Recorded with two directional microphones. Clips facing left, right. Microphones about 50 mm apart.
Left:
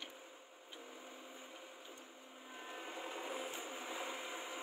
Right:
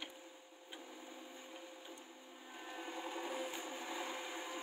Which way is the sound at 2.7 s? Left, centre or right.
Centre.